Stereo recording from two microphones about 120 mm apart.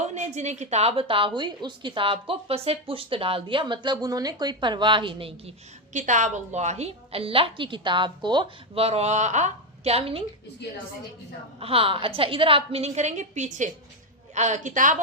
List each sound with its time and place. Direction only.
0.0 s a woman's voice: 75° right (ahead or behind); by 5.5 s 45° right (ahead or behind)
5.9 s a woman's voice: 90° right; by 8.4 s 40° right (ahead or behind)
8.7 s a woman's voice: 55° right (ahead or behind)
11.6 s a woman's voice: 50° right (ahead or behind); by 15.0 s 90° right